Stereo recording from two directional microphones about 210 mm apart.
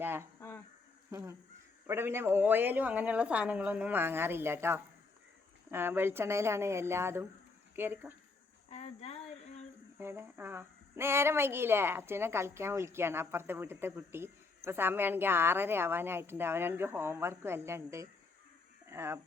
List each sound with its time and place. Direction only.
0.0 s a woman's voice: 10° right (ahead or behind)
8.7 s a sound: 30° left (ahead or behind)
10.0 s a woman's voice: 10° right (ahead or behind)